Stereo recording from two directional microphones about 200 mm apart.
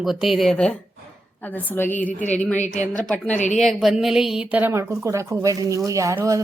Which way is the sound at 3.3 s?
35° left (ahead or behind).